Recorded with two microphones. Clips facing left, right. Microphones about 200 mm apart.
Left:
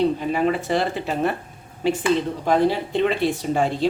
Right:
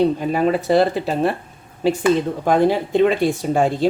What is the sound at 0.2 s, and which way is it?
Speech, 40° right (ahead or behind).